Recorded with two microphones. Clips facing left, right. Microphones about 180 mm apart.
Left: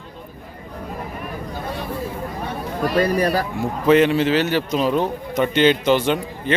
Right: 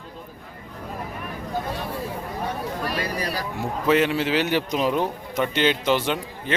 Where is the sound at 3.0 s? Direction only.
60° left (ahead or behind).